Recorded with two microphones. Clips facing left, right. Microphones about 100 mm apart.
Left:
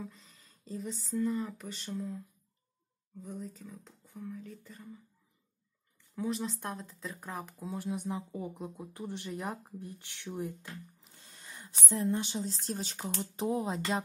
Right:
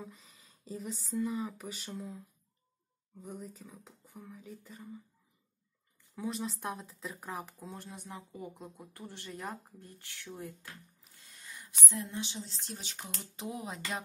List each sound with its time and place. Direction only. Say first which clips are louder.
0.0 s speech: left 3 dB; 5° right (ahead or behind)
6.1 s speech: left 3 dB; centre (ahead or behind); by 10.5 s 15° left (ahead or behind)
11.1 s a sound: even; 30° left (ahead or behind); by 12.5 s 45° left (ahead or behind)
12.6 s speech: left 8 dB; 40° left (ahead or behind)